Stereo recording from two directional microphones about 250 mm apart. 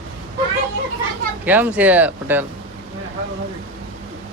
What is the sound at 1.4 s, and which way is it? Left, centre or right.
Speech, centre.